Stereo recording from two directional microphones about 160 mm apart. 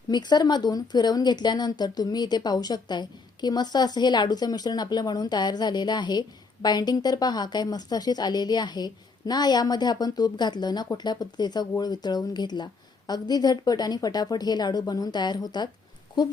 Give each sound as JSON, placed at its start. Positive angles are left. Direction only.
{"t": 0.1, "sound": "a woman's voice", "side_deg": 25}